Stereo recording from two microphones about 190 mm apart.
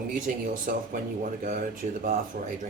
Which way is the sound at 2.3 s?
45° right (ahead or behind).